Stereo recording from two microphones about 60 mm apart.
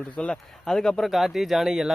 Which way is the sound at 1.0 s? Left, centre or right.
Centre.